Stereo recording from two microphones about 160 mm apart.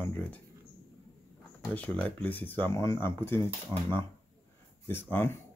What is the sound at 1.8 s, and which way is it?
Speech, 10° left (ahead or behind).